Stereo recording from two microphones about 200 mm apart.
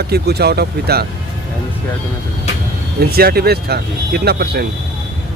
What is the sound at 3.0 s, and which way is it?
Speech, 50° right (ahead or behind).